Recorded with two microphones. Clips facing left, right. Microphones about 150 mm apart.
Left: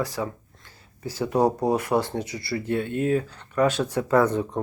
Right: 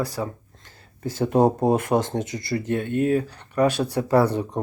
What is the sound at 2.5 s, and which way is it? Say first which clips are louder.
Speech: right 2 dB; 35° right (ahead or behind).